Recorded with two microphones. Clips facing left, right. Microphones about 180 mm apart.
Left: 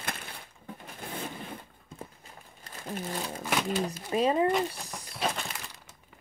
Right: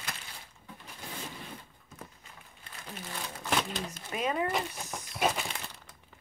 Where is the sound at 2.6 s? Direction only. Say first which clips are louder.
Left 8 dB; 40° left (ahead or behind).